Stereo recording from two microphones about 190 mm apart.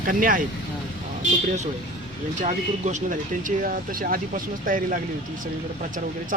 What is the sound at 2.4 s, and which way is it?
Speech, 40° right (ahead or behind).